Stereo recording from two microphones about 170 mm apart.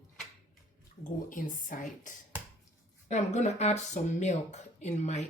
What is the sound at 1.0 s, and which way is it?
Speech, 50° left (ahead or behind).